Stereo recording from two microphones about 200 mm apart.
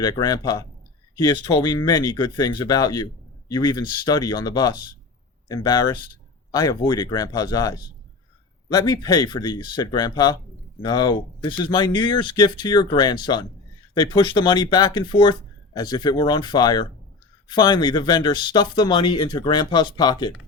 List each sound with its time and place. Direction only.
0.0 s speech: 20° left (ahead or behind)